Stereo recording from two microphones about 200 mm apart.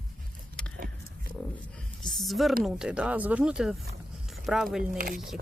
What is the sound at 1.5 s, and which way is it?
Speech, 5° left (ahead or behind).